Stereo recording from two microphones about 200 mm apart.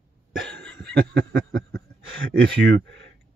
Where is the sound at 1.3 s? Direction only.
55° right (ahead or behind).